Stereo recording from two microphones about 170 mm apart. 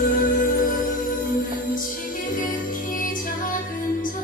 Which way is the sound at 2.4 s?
50° left (ahead or behind).